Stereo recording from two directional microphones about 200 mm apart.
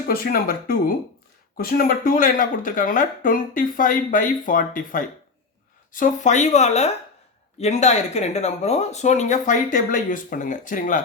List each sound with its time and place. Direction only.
0.1 s speech: 50° left (ahead or behind)